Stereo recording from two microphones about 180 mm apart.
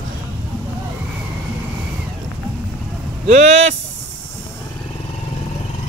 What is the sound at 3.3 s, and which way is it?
Speech, 40° right (ahead or behind).